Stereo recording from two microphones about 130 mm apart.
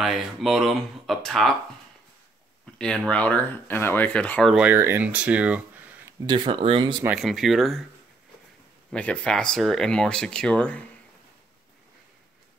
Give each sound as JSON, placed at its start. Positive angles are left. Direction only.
{"t": 0.0, "sound": "speech", "side_deg": 0}
{"t": 2.8, "sound": "speech", "side_deg": 5}
{"t": 4.6, "sound": "speech", "side_deg": -15}
{"t": 6.2, "sound": "speech", "side_deg": -35}
{"t": 7.2, "sound": "speech", "side_deg": 0}
{"t": 8.9, "sound": "speech", "side_deg": 10}